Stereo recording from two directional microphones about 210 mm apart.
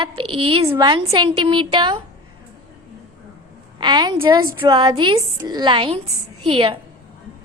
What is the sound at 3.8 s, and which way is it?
A woman's voice, 20° right (ahead or behind).